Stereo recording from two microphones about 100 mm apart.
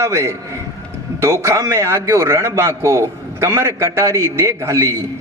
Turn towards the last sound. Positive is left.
turn(degrees=-30)  # may be behind; listen again after turning